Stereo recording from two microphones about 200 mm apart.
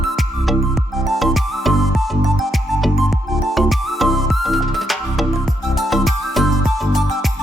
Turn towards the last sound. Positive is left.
turn(degrees=0)  # may be behind; listen again after turning